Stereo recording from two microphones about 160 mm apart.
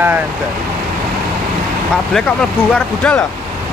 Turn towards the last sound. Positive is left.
turn(degrees=5)  # may be behind; listen again after turning